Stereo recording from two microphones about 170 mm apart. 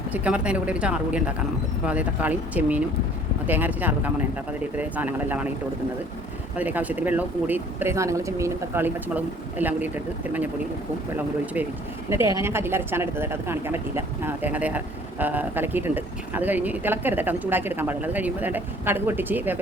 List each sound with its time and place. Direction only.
0.1 s speech: 5° right (ahead or behind)
6.6 s speech: 10° right (ahead or behind)
12.0 s speech: 15° right (ahead or behind)